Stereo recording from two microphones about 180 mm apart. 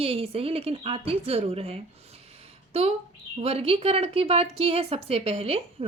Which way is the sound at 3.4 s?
35° right (ahead or behind).